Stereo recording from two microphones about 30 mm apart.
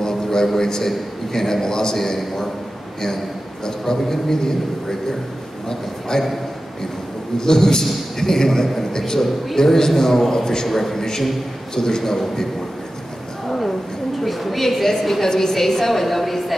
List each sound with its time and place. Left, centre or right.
0.0 s a sound: left
0.6 s a man's voice: centre
3.6 s a man's voice: centre
7.3 s a man's voice: centre
13.5 s a sound: centre
14.2 s a woman's voice: centre